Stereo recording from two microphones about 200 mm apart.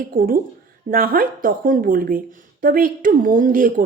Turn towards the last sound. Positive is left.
turn(degrees=-45)  # may be behind; listen again after turning